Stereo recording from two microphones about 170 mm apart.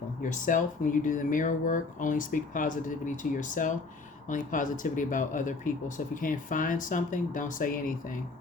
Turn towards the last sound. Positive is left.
turn(degrees=50)  # may be behind; listen again after turning